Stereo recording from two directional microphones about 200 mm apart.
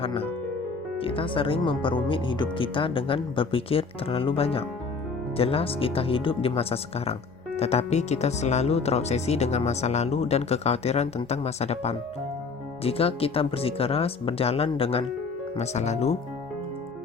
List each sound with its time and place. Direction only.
0.0 s speech: 30° left (ahead or behind)